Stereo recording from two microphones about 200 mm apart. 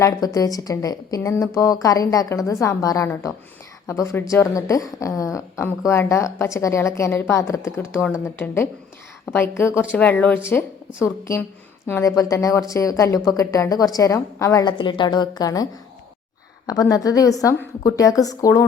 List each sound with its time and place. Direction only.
0.0 s a woman's voice: 15° left (ahead or behind)
16.6 s a woman's voice: 20° left (ahead or behind)